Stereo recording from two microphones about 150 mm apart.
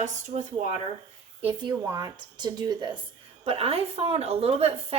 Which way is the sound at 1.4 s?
35° right (ahead or behind).